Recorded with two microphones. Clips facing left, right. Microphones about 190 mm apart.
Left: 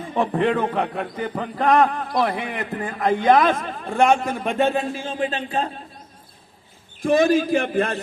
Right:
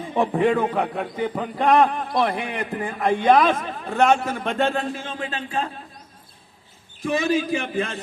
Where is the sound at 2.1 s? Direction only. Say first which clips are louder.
Even; centre (ahead or behind).